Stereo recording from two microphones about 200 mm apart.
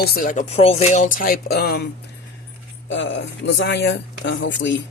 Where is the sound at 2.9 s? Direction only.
65° left (ahead or behind).